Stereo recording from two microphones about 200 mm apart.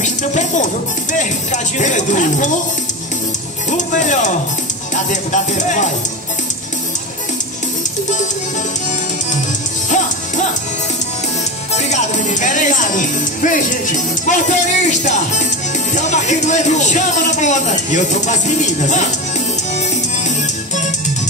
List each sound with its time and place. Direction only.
0.0 s music: 35° left (ahead or behind)
1.1 s speech: 40° left (ahead or behind)
3.7 s speech: 40° left (ahead or behind)
9.8 s music: 40° left (ahead or behind)
11.7 s music: 35° left (ahead or behind)
15.9 s speech: 35° left (ahead or behind)